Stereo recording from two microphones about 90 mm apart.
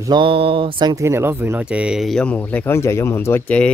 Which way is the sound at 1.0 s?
30° right (ahead or behind).